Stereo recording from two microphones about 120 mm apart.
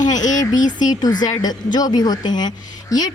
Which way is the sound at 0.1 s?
90° left.